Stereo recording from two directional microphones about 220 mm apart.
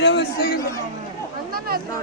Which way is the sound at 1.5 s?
40° right (ahead or behind).